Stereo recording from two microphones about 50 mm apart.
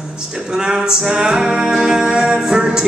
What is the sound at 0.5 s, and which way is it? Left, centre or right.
Music, centre.